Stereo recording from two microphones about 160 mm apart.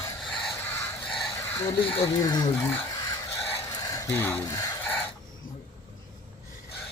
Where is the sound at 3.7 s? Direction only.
20° left (ahead or behind).